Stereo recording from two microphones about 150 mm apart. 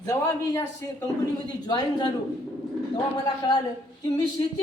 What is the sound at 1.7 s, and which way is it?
Speech, 30° left (ahead or behind).